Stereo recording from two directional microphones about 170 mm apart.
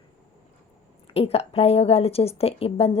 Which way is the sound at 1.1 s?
35° left (ahead or behind).